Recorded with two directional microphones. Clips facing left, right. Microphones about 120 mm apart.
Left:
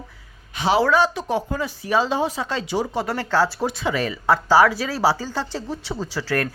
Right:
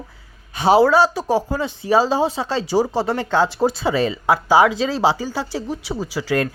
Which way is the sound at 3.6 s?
35° right (ahead or behind).